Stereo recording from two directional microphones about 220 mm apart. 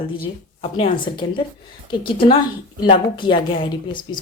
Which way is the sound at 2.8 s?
20° left (ahead or behind).